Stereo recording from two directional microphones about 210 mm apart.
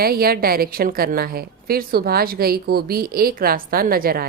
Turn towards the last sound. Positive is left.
turn(degrees=-45)  # may be behind; listen again after turning